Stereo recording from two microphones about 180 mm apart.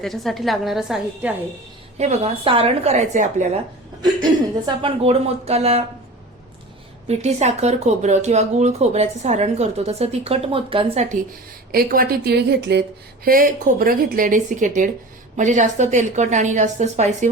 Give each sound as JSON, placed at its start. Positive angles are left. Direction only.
{"t": 0.0, "sound": "a woman's voice", "side_deg": 0}
{"t": 2.0, "sound": "speech", "side_deg": -40}
{"t": 4.0, "sound": "a woman's voice", "side_deg": -25}
{"t": 5.0, "sound": "speech", "side_deg": -35}
{"t": 7.1, "sound": "speech", "side_deg": -35}
{"t": 13.2, "sound": "speech", "side_deg": -55}